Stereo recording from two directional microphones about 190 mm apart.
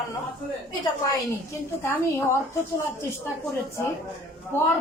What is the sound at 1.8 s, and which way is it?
Music, 15° left (ahead or behind).